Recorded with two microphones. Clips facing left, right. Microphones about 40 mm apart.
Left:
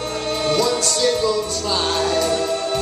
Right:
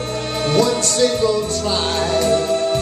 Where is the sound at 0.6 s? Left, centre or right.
Right.